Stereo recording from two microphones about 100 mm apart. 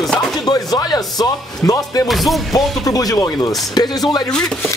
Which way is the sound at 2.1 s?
Centre (ahead or behind).